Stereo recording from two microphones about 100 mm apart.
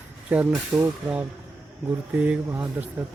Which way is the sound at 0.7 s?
10° right (ahead or behind).